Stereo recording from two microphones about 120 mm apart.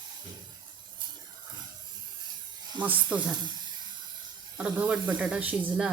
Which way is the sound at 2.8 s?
15° right (ahead or behind).